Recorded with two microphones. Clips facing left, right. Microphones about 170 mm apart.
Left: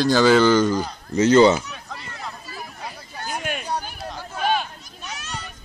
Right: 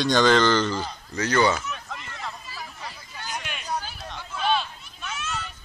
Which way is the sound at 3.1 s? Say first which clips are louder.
Left 8 dB; 50° left (ahead or behind).